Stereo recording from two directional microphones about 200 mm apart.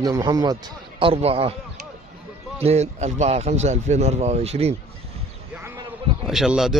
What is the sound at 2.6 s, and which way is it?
A man's voice, 35° right (ahead or behind).